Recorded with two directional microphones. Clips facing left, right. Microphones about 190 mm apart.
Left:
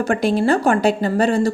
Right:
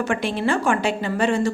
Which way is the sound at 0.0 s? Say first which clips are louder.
Left 5 dB; 40° left (ahead or behind).